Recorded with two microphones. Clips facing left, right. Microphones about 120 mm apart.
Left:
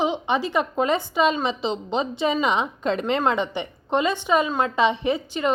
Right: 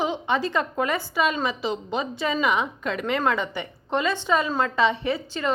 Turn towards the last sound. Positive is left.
turn(degrees=20)  # may be behind; listen again after turning